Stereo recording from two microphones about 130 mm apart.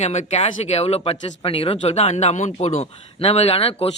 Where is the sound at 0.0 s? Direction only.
60° left (ahead or behind).